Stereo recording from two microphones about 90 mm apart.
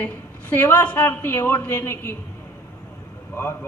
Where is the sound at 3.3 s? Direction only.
25° left (ahead or behind).